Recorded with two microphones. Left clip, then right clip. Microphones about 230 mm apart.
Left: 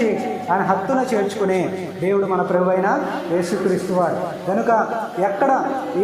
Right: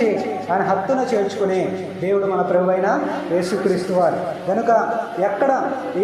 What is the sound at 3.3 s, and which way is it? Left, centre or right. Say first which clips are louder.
A man's voice: right 1 dB; left.